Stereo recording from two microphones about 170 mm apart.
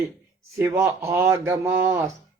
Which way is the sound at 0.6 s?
15° right (ahead or behind).